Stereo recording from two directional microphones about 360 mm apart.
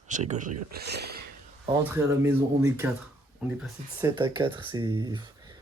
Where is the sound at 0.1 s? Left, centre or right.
Centre.